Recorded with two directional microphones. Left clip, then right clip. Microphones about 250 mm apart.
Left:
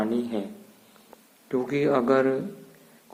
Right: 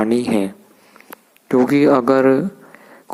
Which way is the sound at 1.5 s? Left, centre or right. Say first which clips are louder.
Right 11 dB; right.